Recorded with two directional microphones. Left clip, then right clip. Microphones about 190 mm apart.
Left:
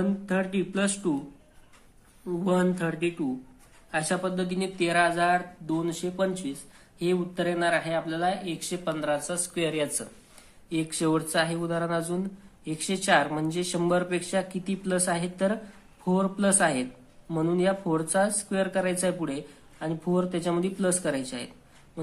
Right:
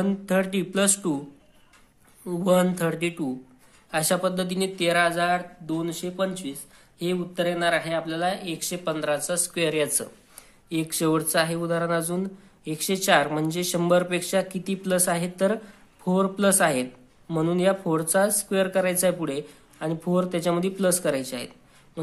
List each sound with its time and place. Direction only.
0.0 s speech: 30° right (ahead or behind)
2.2 s speech: 30° right (ahead or behind)